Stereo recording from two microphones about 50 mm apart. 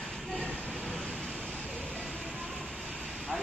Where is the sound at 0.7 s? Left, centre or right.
Centre.